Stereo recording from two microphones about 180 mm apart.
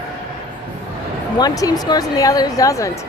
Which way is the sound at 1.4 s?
20° left (ahead or behind).